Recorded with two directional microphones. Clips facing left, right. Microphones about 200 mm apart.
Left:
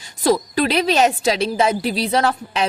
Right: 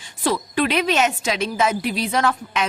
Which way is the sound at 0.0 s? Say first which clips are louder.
Left 5 dB; 40° left (ahead or behind).